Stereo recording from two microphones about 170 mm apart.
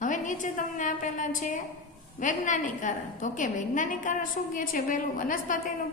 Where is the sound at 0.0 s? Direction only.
50° left (ahead or behind).